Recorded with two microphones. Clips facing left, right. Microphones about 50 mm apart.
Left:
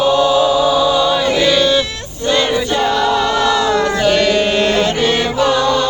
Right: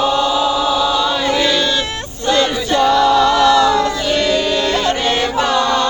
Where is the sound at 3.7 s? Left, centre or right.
Left.